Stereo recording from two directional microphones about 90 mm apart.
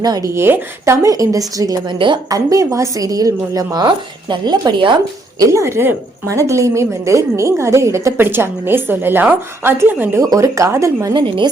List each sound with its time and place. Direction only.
0.0 s a woman's voice: 50° right (ahead or behind)
0.3 s speech: 25° right (ahead or behind)
1.0 s a woman's voice: 40° right (ahead or behind)
1.9 s a woman's voice: 60° right (ahead or behind)
2.3 s a woman's voice: 40° right (ahead or behind)
5.4 s a woman's voice: 35° right (ahead or behind)
10.2 s a woman's voice: 35° right (ahead or behind)
11.1 s a woman's voice: 60° right (ahead or behind)